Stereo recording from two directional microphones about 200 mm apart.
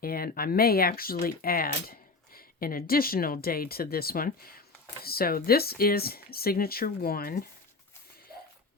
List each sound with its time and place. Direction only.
0.0 s speech: 45° left (ahead or behind)